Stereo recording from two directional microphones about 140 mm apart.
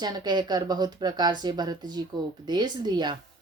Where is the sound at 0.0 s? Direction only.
30° right (ahead or behind).